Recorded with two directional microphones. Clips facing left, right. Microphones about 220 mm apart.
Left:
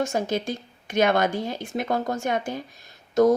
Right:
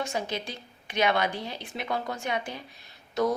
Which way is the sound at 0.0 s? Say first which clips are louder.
Left 7 dB; 45° left (ahead or behind).